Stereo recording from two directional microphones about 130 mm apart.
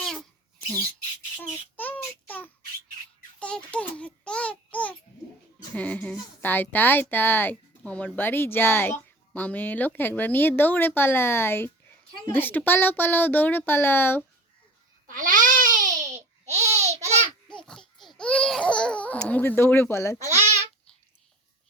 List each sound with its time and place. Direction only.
1.4 s child singing: 15° left (ahead or behind)
3.4 s babbling: 10° left (ahead or behind)
5.7 s a woman's voice: 10° left (ahead or behind)
15.0 s babbling: 90° right; by 17.2 s 60° right (ahead or behind)
17.7 s babbling: centre (ahead or behind); by 20.1 s 20° left (ahead or behind)
20.1 s babbling: 60° right (ahead or behind)